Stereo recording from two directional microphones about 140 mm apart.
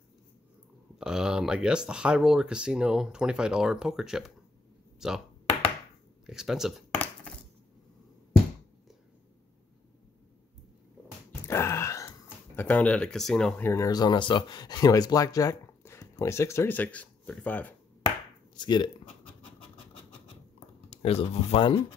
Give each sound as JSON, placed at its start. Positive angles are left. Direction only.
{"t": 0.9, "sound": "speech", "side_deg": -5}
{"t": 6.2, "sound": "speech", "side_deg": -5}
{"t": 11.4, "sound": "wail", "side_deg": 20}
{"t": 12.5, "sound": "speech", "side_deg": 10}
{"t": 13.8, "sound": "speech", "side_deg": 30}
{"t": 18.6, "sound": "a sound", "side_deg": 30}
{"t": 20.9, "sound": "speech", "side_deg": 45}